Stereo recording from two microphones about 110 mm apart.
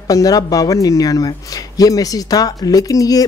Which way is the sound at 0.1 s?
35° left (ahead or behind).